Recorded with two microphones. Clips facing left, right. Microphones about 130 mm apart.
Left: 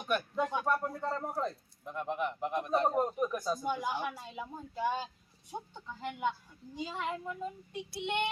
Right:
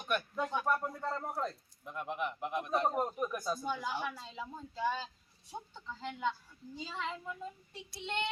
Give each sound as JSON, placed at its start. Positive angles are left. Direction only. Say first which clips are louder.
{"t": 0.3, "sound": "child singing", "louder": "left 3 dB", "side_deg": 15}
{"t": 0.7, "sound": "a man's voice", "louder": "left 2 dB", "side_deg": 5}
{"t": 3.6, "sound": "child singing", "louder": "left 3 dB", "side_deg": 15}